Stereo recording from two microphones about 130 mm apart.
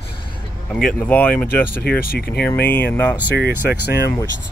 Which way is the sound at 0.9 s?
10° left (ahead or behind).